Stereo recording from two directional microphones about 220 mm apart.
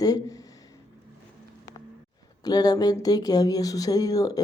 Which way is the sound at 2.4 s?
15° left (ahead or behind).